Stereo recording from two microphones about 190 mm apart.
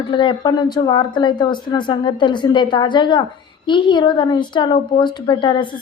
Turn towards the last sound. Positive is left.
turn(degrees=25)  # may be behind; listen again after turning